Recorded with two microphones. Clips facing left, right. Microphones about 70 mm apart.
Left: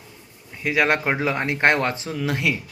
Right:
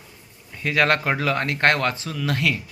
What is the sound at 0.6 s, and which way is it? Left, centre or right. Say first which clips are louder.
A man's voice: even; centre.